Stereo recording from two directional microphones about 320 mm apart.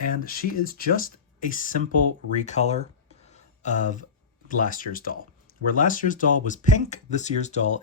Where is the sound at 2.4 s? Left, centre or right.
Left.